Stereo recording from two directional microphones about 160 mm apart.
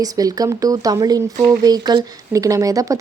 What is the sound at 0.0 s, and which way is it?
Speech, 25° right (ahead or behind).